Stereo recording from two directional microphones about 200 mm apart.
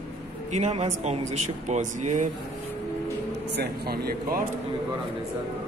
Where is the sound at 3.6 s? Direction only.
50° right (ahead or behind).